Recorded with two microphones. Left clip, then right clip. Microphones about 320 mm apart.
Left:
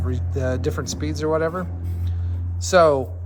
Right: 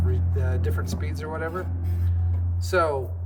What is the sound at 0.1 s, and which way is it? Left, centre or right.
Speech, centre.